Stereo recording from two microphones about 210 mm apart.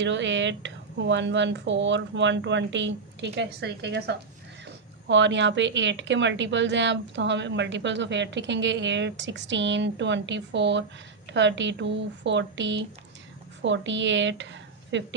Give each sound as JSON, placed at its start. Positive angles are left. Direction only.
{"t": 0.0, "sound": "a woman's voice", "side_deg": -60}